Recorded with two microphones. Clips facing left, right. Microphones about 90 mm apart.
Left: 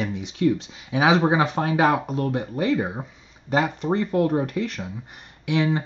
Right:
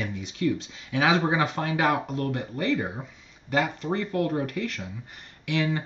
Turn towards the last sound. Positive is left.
turn(degrees=20)  # may be behind; listen again after turning